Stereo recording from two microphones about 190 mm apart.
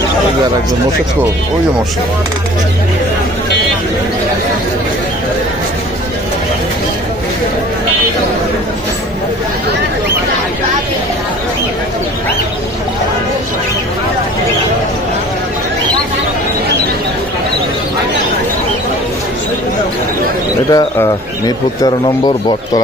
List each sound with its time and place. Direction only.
20.7 s speech: 20° left (ahead or behind)